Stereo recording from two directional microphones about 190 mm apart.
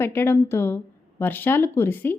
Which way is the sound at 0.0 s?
10° left (ahead or behind).